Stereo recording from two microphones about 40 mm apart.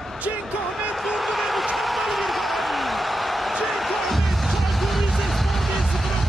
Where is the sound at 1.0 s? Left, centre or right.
Centre.